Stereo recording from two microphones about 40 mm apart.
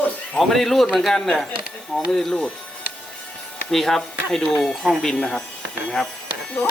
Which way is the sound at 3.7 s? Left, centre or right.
Centre.